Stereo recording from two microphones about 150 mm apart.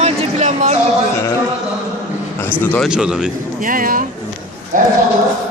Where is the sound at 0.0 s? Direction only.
50° right (ahead or behind).